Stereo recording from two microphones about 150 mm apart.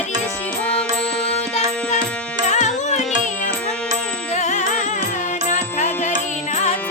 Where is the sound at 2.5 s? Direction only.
50° left (ahead or behind).